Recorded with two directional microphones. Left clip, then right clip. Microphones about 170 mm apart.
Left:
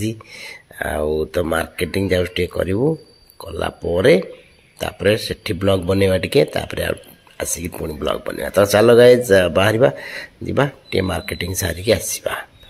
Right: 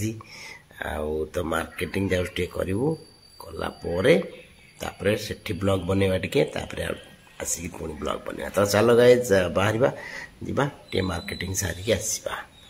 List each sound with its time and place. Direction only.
0.0 s speech: 20° left (ahead or behind)